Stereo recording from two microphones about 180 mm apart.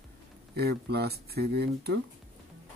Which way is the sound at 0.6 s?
65° right (ahead or behind).